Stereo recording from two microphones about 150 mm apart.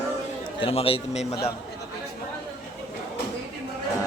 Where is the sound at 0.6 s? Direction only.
40° left (ahead or behind).